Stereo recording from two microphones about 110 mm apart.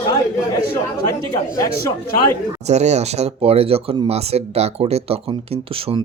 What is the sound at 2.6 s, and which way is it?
Speech, 90° right.